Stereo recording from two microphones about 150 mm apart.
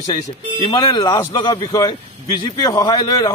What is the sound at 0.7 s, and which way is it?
A man's voice, 35° left (ahead or behind).